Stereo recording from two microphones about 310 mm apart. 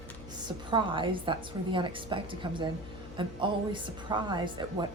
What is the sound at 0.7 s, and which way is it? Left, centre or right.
A woman's voice, centre.